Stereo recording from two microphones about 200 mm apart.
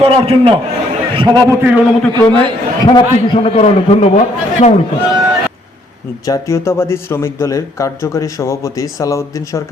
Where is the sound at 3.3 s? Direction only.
30° left (ahead or behind).